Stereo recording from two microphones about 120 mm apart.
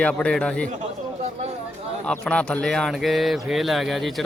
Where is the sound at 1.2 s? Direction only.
65° right (ahead or behind).